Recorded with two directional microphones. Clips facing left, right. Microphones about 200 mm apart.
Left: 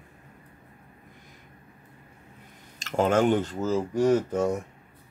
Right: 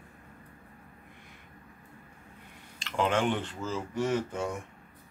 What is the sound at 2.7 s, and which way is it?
Speech, 45° left (ahead or behind).